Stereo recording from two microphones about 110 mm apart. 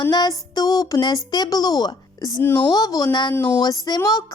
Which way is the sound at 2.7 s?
35° left (ahead or behind).